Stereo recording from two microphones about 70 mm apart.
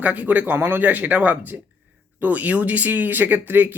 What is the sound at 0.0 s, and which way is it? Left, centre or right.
Speech, right.